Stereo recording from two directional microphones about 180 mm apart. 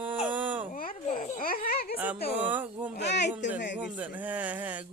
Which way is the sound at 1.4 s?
55° left (ahead or behind).